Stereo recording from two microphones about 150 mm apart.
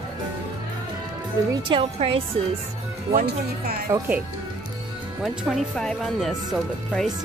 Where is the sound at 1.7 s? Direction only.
40° right (ahead or behind).